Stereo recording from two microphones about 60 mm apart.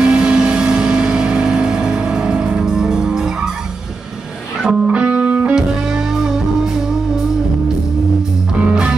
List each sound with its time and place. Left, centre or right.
0.1 s music: centre
4.6 s music: centre
5.5 s music: centre